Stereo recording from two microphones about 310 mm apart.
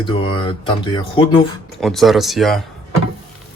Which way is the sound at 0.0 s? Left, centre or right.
Centre.